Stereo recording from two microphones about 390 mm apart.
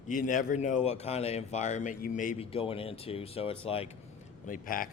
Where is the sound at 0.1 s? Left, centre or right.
Centre.